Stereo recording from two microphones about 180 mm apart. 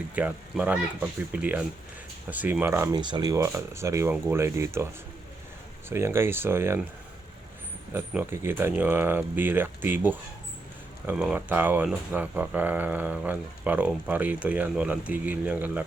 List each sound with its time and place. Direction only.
0.1 s speech: 10° right (ahead or behind)
3.0 s speech: 25° right (ahead or behind)
5.9 s speech: 15° right (ahead or behind)
7.9 s speech: 15° right (ahead or behind)